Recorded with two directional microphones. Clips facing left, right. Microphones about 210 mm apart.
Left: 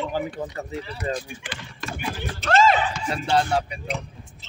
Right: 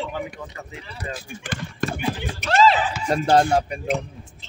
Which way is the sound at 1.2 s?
50° right (ahead or behind).